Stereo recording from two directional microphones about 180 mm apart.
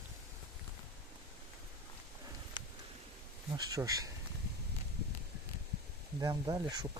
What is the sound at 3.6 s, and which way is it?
Speech, 20° right (ahead or behind).